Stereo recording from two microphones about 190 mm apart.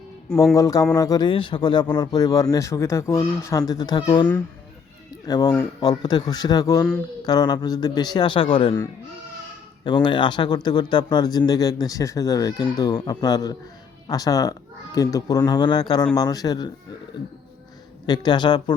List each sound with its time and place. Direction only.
0.5 s speech: 15° left (ahead or behind)
9.8 s speech: 25° left (ahead or behind)
18.0 s speech: 20° left (ahead or behind)